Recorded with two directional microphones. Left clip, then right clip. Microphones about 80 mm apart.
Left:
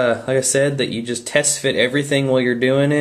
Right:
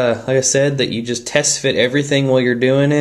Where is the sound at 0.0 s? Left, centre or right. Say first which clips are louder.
Right 2 dB; right.